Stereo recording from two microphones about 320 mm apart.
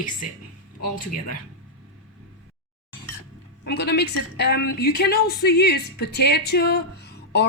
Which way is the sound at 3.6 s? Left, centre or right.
Left.